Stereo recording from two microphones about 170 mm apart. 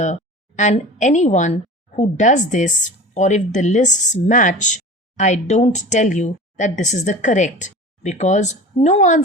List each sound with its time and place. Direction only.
0.0 s a woman's voice: 45° left (ahead or behind)